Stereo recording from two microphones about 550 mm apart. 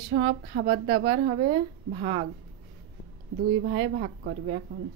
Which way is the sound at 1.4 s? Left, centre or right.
Centre.